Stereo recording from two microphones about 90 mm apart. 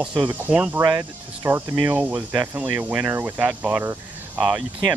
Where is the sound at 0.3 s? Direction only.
15° right (ahead or behind).